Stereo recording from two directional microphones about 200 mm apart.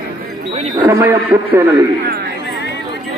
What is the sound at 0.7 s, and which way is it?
Speech, 15° right (ahead or behind).